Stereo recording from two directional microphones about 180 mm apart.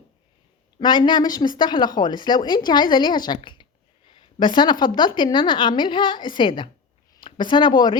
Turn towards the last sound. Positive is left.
turn(degrees=25)  # may be behind; listen again after turning